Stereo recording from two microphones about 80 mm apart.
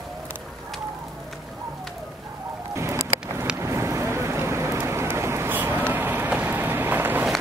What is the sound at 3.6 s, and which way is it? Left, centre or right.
Vehicle, right.